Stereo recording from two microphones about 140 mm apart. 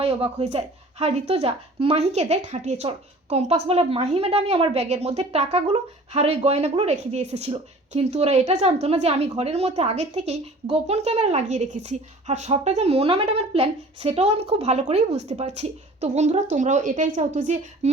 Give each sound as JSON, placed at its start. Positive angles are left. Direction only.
{"t": 0.0, "sound": "speech", "side_deg": -45}